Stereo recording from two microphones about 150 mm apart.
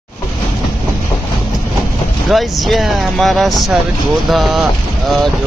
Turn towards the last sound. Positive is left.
turn(degrees=0)  # may be behind; listen again after turning